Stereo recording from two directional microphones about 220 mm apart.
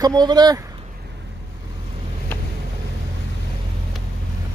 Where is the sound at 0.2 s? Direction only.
20° right (ahead or behind).